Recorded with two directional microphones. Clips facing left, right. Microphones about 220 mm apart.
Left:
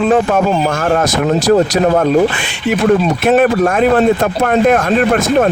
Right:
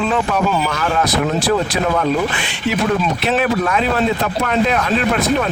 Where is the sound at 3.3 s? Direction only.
50° left (ahead or behind).